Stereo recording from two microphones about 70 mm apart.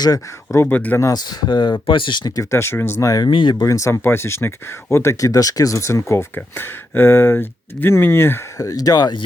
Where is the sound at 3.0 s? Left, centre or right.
Left.